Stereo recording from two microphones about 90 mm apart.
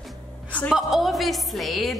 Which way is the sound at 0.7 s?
Centre (ahead or behind).